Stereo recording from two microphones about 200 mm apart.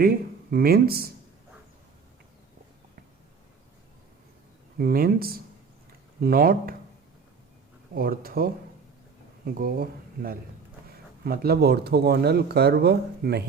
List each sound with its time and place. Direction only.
0.0 s speech: 50° right (ahead or behind)
4.8 s speech: 50° right (ahead or behind)
7.9 s speech: 50° right (ahead or behind)
9.6 s speech: 45° right (ahead or behind)